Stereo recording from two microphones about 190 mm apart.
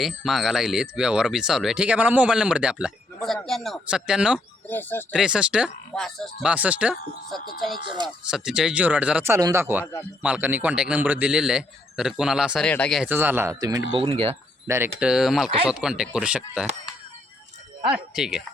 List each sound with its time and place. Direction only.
0.0 s speech: centre (ahead or behind)
4.7 s speech: 10° left (ahead or behind)
5.1 s speech: 5° right (ahead or behind)
7.9 s speech: 25° right (ahead or behind)
8.3 s speech: 5° right (ahead or behind)
9.8 s speech: 15° left (ahead or behind)
10.2 s speech: 10° right (ahead or behind)
13.1 s speech: 10° right (ahead or behind); by 14.3 s 30° right (ahead or behind)
14.7 s speech: 10° right (ahead or behind)
17.9 s speech: 5° right (ahead or behind)